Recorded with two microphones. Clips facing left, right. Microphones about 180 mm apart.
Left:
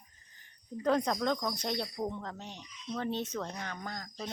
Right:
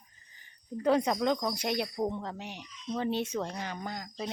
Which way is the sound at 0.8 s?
5° right (ahead or behind).